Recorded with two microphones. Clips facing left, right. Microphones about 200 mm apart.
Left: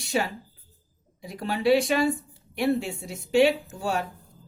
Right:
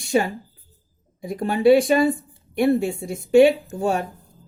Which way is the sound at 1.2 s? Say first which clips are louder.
Right 8 dB; 50° right (ahead or behind).